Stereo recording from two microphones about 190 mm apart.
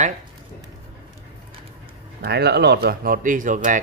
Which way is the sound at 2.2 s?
60° right (ahead or behind).